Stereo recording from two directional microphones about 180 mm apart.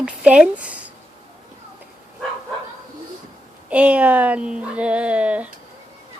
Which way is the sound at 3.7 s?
5° right (ahead or behind).